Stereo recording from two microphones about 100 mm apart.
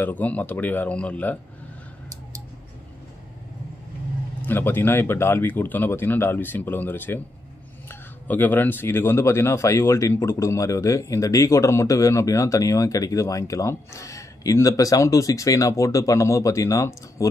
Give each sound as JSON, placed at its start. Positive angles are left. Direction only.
{"t": 0.0, "sound": "speech", "side_deg": 15}
{"t": 4.4, "sound": "speech", "side_deg": 20}